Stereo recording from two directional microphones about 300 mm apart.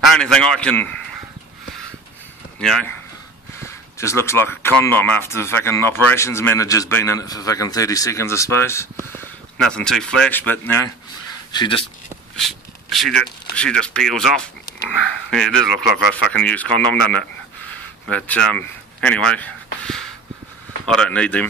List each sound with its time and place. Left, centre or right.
0.0 s speech: centre
2.6 s speech: centre
12.4 s a sound: centre
13.6 s speech: centre